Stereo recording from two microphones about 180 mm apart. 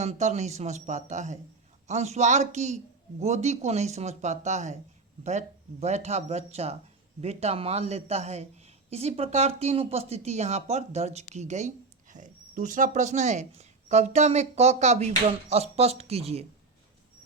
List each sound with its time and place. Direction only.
0.0 s speech: 40° right (ahead or behind)